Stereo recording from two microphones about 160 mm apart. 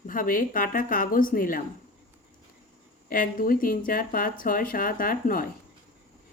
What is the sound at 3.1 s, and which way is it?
Speech, 60° left (ahead or behind).